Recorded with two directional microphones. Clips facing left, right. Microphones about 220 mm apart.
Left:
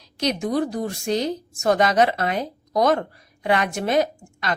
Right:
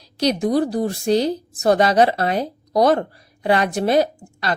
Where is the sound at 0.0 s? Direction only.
35° right (ahead or behind).